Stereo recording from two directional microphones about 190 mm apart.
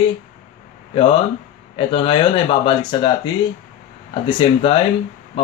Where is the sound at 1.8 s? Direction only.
25° left (ahead or behind).